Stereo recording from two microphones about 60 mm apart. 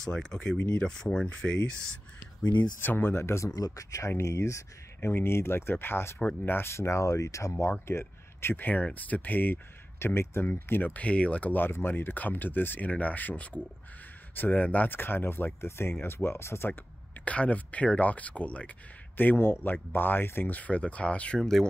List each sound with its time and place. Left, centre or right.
0.0 s speech: centre
2.8 s speech: left
3.5 s speech: left
4.2 s speech: left
5.0 s speech: left
7.8 s speech: left
9.9 s speech: left
10.4 s speech: left
11.5 s speech: left
17.2 s speech: left
19.1 s speech: left; by 21.4 s centre
21.4 s speech: centre